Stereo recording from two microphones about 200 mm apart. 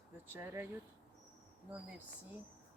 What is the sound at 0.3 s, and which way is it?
Speech, 10° right (ahead or behind).